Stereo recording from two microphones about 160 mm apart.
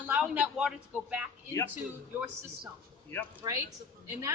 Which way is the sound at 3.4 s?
25° right (ahead or behind).